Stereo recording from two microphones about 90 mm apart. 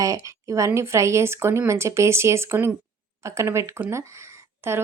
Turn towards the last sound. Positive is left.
turn(degrees=-30)  # may be behind; listen again after turning